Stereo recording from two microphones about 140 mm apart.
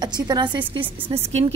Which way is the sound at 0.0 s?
30° right (ahead or behind).